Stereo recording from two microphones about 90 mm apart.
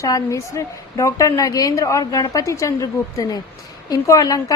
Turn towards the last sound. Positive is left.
turn(degrees=40)  # may be behind; listen again after turning